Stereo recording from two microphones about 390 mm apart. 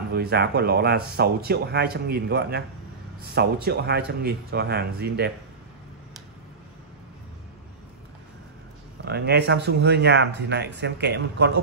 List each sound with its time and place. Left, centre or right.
0.1 s speech: right
9.0 s speech: right